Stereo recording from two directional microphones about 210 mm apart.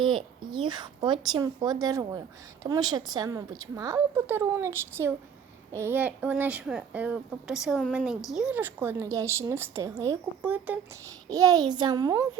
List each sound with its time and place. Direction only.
0.0 s a woman's voice: 25° right (ahead or behind)